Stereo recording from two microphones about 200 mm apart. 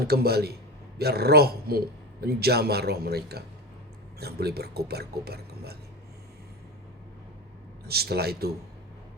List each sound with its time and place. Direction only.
0.0 s speech: 50° right (ahead or behind)
7.9 s speech: 50° right (ahead or behind)